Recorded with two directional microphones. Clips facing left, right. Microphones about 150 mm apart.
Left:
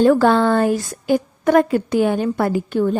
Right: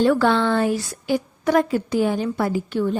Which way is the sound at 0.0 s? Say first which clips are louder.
Left 4 dB; 45° left (ahead or behind).